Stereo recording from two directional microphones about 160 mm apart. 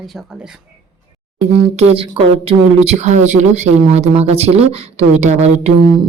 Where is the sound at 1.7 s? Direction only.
35° right (ahead or behind).